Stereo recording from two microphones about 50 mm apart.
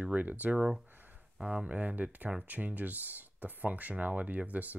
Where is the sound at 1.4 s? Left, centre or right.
Right.